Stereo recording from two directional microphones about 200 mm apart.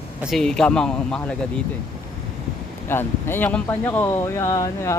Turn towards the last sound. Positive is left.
turn(degrees=15)  # may be behind; listen again after turning